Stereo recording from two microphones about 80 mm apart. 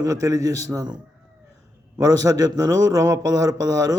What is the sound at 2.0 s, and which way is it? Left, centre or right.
Speech, right.